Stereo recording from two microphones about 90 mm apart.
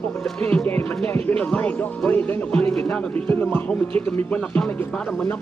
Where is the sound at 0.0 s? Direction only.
15° left (ahead or behind).